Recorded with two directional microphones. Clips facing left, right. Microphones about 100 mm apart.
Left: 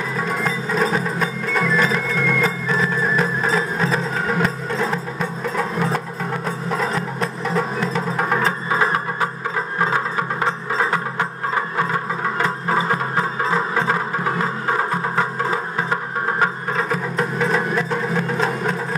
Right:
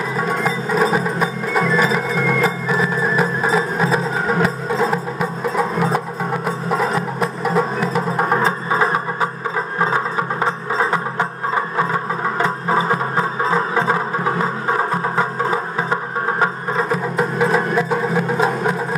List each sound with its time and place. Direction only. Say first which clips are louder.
0.2 s music: right 3 dB; 5° right (ahead or behind)
8.2 s music: right 2 dB; 25° right (ahead or behind)